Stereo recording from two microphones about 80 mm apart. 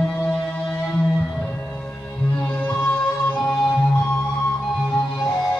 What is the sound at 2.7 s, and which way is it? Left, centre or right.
Music, left.